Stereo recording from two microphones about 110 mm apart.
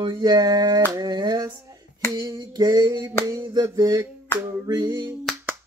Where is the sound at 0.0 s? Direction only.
45° right (ahead or behind).